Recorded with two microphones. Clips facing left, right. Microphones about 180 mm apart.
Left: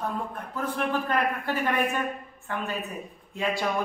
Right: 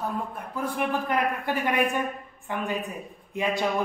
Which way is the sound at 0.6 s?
15° right (ahead or behind).